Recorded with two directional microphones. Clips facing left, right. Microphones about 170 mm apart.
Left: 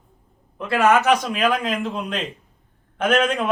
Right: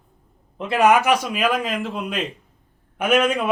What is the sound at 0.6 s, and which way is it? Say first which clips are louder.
Speech: right 1 dB; 20° right (ahead or behind).